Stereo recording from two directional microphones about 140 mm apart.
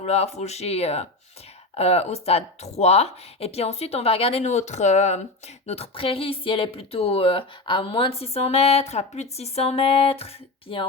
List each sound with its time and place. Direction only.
0.0 s speech: 50° left (ahead or behind)